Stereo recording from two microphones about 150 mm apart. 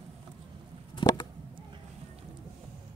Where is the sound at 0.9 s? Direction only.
25° left (ahead or behind).